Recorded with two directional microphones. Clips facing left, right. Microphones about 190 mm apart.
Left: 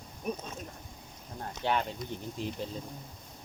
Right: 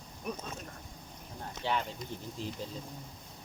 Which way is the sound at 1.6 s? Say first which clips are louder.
Left 3 dB; 55° left (ahead or behind).